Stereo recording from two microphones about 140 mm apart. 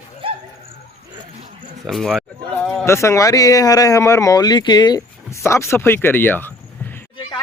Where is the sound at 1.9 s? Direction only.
Centre (ahead or behind).